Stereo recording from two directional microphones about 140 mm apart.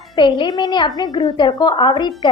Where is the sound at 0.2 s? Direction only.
35° left (ahead or behind).